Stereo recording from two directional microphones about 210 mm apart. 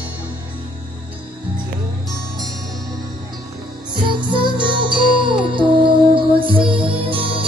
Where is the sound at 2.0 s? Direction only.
Centre (ahead or behind).